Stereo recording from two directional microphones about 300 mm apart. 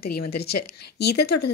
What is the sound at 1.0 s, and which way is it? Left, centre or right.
Speech, left.